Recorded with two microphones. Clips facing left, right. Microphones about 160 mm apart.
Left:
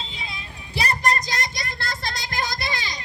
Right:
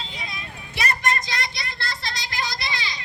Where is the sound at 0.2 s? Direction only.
30° left (ahead or behind).